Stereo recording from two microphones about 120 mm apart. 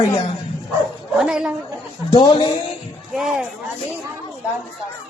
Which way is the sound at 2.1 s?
40° left (ahead or behind).